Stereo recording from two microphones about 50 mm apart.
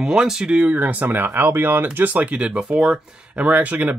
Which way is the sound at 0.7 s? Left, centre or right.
Right.